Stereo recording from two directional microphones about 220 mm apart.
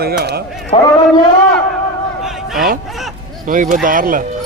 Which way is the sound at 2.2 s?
Centre (ahead or behind).